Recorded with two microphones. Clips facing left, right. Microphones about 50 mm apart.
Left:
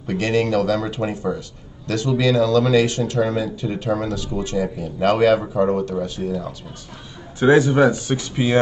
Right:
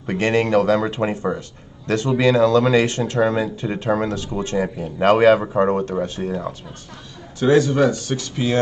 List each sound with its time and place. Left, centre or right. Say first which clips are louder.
0.0 s speech: right 1 dB; right
7.3 s speech: left 1 dB; centre